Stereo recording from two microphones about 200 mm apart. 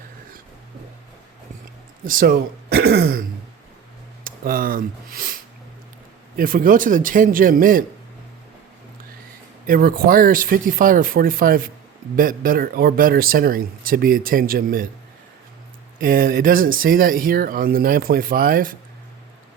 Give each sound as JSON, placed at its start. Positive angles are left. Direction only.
{"t": 2.0, "sound": "speech", "side_deg": -45}
{"t": 9.6, "sound": "speech", "side_deg": -45}
{"t": 16.0, "sound": "speech", "side_deg": -45}